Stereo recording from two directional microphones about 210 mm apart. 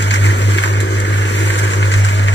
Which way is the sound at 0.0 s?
55° left (ahead or behind).